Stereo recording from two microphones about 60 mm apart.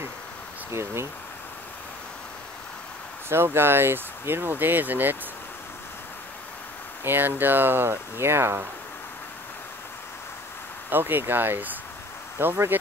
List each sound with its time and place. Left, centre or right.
0.7 s speech: right
3.3 s speech: right
7.1 s speech: right
10.9 s speech: right